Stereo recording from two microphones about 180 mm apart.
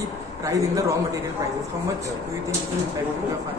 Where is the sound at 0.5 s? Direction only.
15° right (ahead or behind).